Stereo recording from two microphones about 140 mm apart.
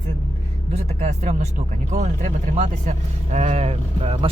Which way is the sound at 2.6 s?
55° right (ahead or behind).